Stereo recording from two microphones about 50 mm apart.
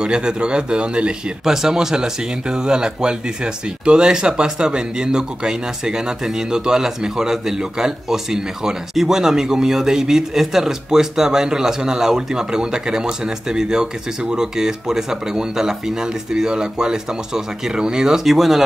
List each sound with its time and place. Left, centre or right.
0.0 s speech: centre
1.4 s speech: centre
18.2 s speech: centre